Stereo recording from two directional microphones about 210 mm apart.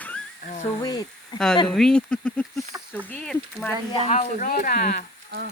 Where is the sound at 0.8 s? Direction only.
20° left (ahead or behind).